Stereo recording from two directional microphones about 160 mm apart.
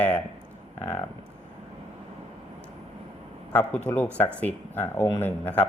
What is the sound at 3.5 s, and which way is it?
A man's voice, 10° left (ahead or behind).